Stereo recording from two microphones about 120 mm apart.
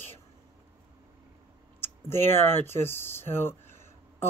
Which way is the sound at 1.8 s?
20° left (ahead or behind).